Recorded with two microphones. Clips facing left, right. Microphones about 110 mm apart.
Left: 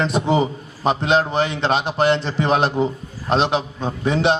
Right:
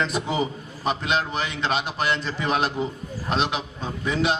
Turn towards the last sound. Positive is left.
turn(degrees=30)  # may be behind; listen again after turning